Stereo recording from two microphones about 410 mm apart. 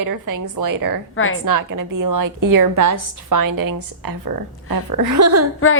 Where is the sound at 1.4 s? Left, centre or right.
Right.